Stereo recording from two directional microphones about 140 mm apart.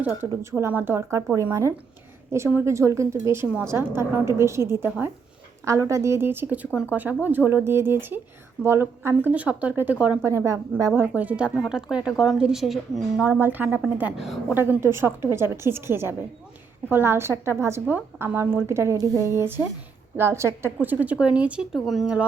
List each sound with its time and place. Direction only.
0.0 s speech: 15° right (ahead or behind)
10.2 s speech: 20° right (ahead or behind)
13.8 s a woman's voice: centre (ahead or behind)
14.5 s speech: 15° right (ahead or behind)